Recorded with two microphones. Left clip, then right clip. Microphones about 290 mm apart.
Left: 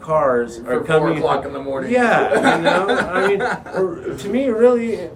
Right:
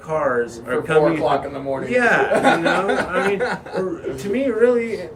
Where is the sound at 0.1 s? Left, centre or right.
Centre.